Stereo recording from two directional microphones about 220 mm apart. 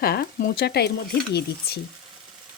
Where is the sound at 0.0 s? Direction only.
45° left (ahead or behind).